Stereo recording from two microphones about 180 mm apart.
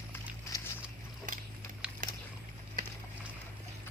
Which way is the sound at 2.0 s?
45° right (ahead or behind).